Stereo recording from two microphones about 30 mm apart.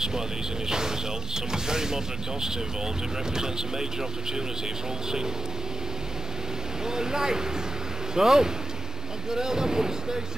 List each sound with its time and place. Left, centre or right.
0.7 s speech: centre
6.9 s speech: right